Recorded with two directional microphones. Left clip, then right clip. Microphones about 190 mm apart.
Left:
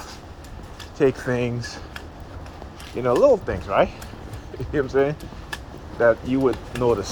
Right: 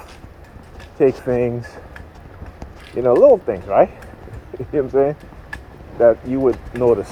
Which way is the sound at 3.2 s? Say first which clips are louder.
Right 6 dB; 50° right (ahead or behind).